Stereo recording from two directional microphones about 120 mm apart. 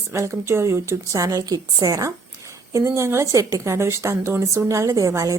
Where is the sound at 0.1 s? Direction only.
20° right (ahead or behind).